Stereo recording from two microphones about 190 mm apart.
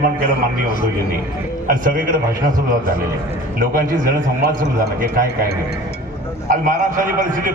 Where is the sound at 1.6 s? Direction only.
45° right (ahead or behind).